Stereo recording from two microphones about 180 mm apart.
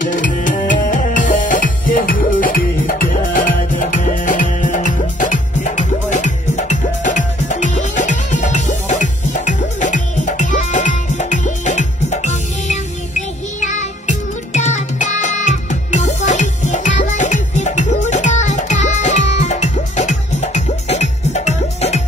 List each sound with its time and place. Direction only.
0.0 s music: 45° left (ahead or behind)